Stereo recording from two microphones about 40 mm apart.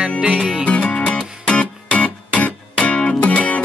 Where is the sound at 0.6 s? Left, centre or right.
Left.